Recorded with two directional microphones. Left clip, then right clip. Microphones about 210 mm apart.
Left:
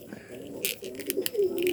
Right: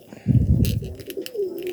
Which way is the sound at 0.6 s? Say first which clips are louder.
Right 4 dB; 25° left (ahead or behind).